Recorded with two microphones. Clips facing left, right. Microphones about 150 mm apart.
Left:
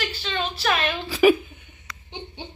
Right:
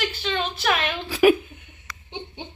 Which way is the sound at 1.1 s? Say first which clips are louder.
Even; centre (ahead or behind).